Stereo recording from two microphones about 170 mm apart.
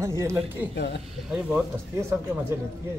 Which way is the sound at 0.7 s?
90° left.